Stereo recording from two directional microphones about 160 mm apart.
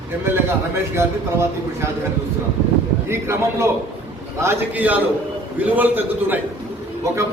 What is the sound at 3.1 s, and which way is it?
A man's voice, 15° right (ahead or behind).